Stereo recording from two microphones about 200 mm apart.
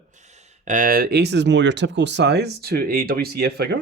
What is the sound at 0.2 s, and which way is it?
Speech, 35° right (ahead or behind).